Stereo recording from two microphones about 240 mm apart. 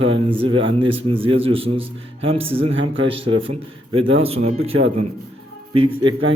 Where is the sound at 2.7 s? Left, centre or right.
Right.